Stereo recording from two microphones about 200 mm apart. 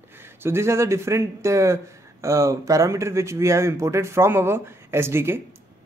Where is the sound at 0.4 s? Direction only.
10° right (ahead or behind).